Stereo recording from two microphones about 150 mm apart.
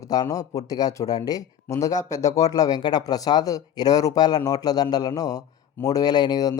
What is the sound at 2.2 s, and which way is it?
Speech, 50° left (ahead or behind).